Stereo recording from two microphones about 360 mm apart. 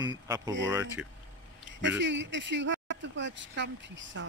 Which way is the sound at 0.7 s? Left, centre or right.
Centre.